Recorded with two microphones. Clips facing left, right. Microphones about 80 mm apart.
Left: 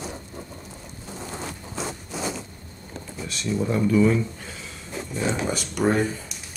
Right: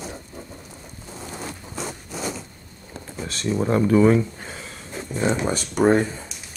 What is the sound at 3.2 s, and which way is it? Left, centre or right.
Speech, right.